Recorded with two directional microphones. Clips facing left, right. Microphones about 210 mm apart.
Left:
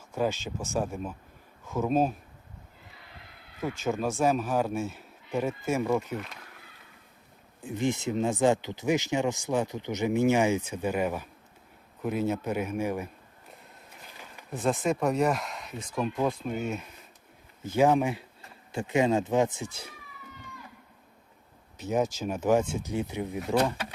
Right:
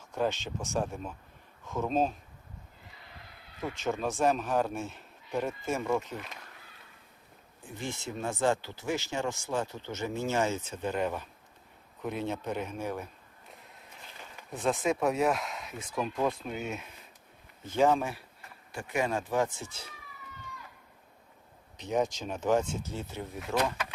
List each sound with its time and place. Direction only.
0.1 s a man's voice: 5° left (ahead or behind)
3.6 s a man's voice: 5° left (ahead or behind)
7.6 s speech: 20° left (ahead or behind)
14.2 s a man's voice: 5° left (ahead or behind)
17.7 s speech: 10° left (ahead or behind)
21.8 s speech: 5° left (ahead or behind)